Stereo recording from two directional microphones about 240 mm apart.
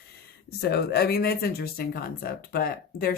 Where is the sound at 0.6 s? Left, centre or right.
Left.